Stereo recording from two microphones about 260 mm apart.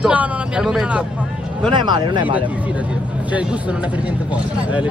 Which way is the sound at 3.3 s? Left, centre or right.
Centre.